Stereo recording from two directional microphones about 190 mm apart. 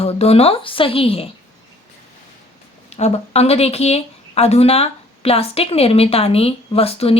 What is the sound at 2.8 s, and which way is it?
Speech, 35° left (ahead or behind).